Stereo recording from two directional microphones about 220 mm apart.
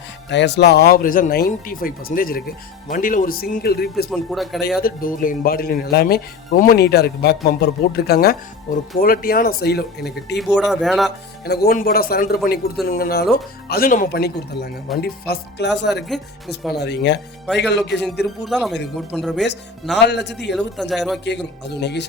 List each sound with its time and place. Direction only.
0.3 s speech: 50° left (ahead or behind)
4.1 s speech: centre (ahead or behind)
4.8 s speech: 40° left (ahead or behind)
10.3 s speech: centre (ahead or behind)
11.4 s speech: 45° left (ahead or behind)
18.4 s speech: centre (ahead or behind)
19.9 s speech: 50° left (ahead or behind)
20.6 s speech: centre (ahead or behind)
21.2 s speech: 50° left (ahead or behind)